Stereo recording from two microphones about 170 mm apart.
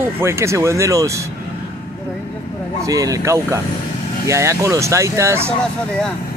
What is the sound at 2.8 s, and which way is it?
Speech, 20° right (ahead or behind).